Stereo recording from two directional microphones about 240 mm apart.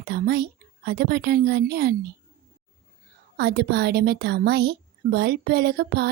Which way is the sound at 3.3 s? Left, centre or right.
Right.